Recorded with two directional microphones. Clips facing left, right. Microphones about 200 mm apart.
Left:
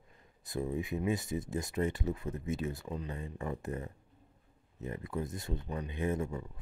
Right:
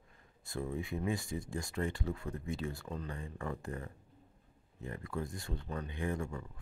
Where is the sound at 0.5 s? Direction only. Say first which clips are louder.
Left 3 dB; 20° left (ahead or behind).